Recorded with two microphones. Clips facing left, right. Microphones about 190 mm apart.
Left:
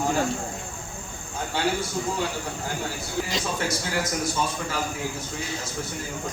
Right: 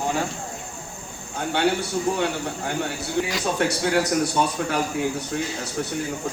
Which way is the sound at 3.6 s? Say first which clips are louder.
Right 6 dB; 65° right (ahead or behind).